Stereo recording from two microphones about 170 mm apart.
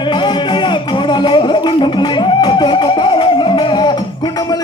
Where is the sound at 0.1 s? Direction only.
25° left (ahead or behind).